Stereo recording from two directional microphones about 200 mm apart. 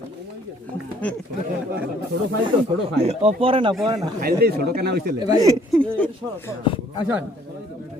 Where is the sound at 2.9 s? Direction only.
30° right (ahead or behind).